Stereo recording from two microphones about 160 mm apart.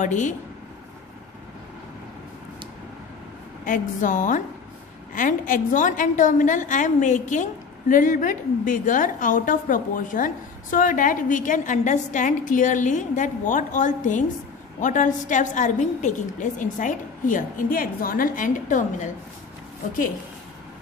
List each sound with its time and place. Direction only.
0.0 s a woman's voice: 50° left (ahead or behind)
3.6 s a woman's voice: 55° left (ahead or behind)